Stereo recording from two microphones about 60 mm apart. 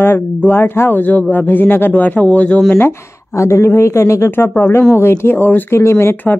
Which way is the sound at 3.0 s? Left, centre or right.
Left.